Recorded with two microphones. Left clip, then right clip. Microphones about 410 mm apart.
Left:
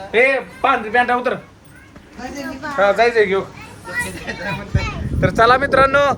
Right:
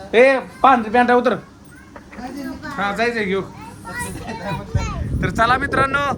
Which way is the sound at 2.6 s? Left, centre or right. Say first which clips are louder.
Left 7 dB; centre.